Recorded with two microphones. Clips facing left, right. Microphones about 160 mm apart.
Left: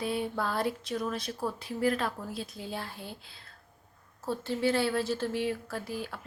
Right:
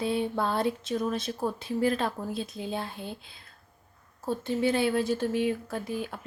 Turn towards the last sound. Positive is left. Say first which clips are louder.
# right 3 dB
turn(degrees=-20)  # may be behind; listen again after turning